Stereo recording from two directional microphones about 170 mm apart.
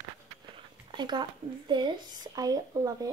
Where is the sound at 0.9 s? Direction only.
25° right (ahead or behind).